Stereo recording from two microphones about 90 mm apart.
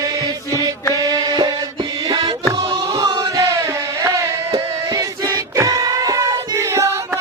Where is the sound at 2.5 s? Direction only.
40° right (ahead or behind).